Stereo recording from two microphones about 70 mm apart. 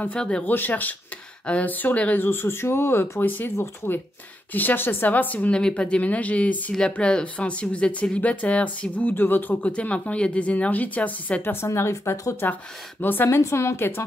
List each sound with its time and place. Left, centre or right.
0.2 s speech: centre
0.5 s speech: left
11.4 s speech: left
12.4 s speech: left
13.4 s speech: left